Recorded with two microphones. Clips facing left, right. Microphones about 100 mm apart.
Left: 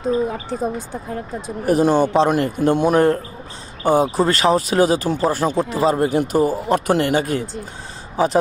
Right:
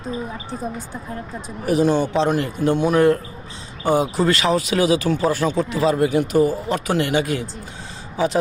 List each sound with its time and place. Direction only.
0.1 s speech: 55° left (ahead or behind)
1.6 s a man's voice: 45° left (ahead or behind)